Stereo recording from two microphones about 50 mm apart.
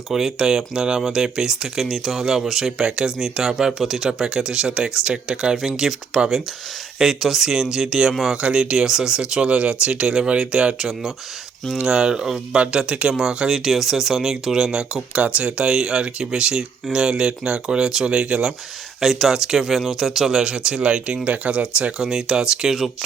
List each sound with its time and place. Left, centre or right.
0.1 s speech: centre
10.8 s speech: centre
15.1 s speech: right
18.9 s speech: centre; by 22.0 s right
22.0 s speech: centre